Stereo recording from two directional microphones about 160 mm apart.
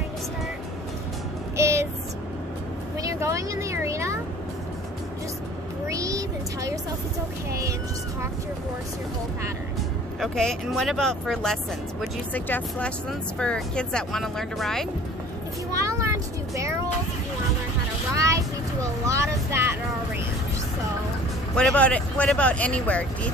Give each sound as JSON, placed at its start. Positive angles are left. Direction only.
{"t": 1.6, "sound": "a sound", "side_deg": -15}
{"t": 3.0, "sound": "vehicle", "side_deg": -20}
{"t": 5.9, "sound": "a sound", "side_deg": -20}
{"t": 10.2, "sound": "speech", "side_deg": 5}
{"t": 15.8, "sound": "vehicle", "side_deg": -20}
{"t": 18.1, "sound": "vehicle", "side_deg": -20}
{"t": 21.5, "sound": "speech", "side_deg": 5}